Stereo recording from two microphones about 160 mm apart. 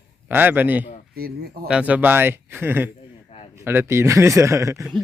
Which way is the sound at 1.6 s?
5° right (ahead or behind).